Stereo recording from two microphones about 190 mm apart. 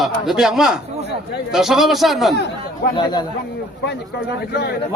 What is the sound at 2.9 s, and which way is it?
Speech, 20° left (ahead or behind).